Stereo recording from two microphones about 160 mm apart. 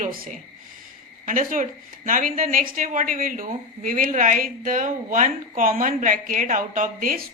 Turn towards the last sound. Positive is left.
turn(degrees=-60)  # may be behind; listen again after turning